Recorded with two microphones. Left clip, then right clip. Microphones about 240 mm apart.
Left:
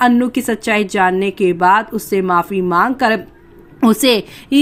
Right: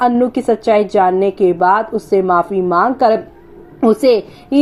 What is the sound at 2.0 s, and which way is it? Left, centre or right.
Speech, left.